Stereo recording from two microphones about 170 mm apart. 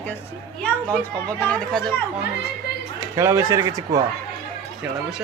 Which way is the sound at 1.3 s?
5° left (ahead or behind).